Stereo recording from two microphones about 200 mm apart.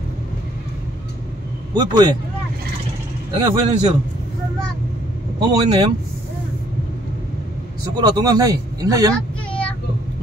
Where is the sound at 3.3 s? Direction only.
25° right (ahead or behind).